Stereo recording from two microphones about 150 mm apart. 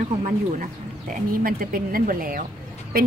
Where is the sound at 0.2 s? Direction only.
55° right (ahead or behind).